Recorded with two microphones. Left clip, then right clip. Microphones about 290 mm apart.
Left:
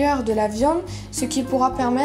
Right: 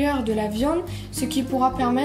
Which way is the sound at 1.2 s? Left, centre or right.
Centre.